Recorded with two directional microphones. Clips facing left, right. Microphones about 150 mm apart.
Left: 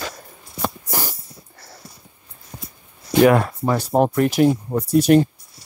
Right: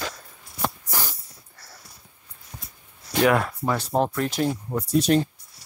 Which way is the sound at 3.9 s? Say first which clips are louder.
Left 8 dB; 10° left (ahead or behind).